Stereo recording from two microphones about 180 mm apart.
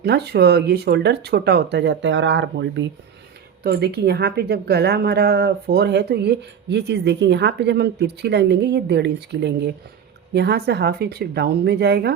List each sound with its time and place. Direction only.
0.0 s a woman's voice: 65° right (ahead or behind); by 2.8 s 90° right
3.6 s a woman's voice: 60° right (ahead or behind)